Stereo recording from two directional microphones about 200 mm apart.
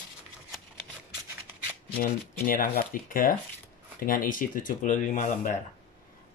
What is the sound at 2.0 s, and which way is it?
Speech, 45° left (ahead or behind).